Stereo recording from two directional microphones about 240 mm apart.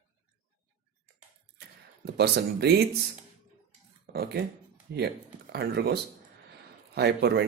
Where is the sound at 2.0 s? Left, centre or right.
Right.